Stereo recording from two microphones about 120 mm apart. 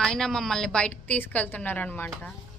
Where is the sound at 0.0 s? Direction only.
5° left (ahead or behind).